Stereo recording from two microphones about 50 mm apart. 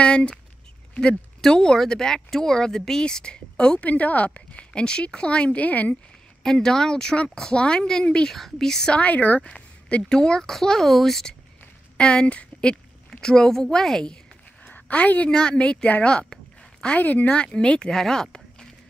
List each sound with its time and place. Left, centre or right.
0.0 s a sound: left
1.4 s a woman's voice: centre
3.8 s speech: left
6.4 s a woman's voice: centre
8.3 s a woman's voice: centre
8.9 s a woman's voice: left; by 11.3 s centre
12.0 s a woman's voice: centre
14.6 s a sound: left
15.3 s speech: centre
17.0 s speech: left
17.3 s a woman's voice: centre
18.0 s a sound: centre